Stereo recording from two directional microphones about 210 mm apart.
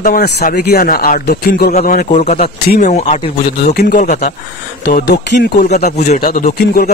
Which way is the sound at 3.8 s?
50° left (ahead or behind).